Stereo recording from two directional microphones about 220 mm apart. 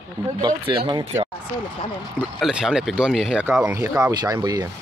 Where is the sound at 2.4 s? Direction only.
Centre (ahead or behind).